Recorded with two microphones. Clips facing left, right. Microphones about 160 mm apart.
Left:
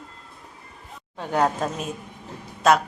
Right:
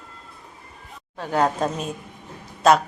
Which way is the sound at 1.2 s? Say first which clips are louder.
Right 1 dB; 10° left (ahead or behind).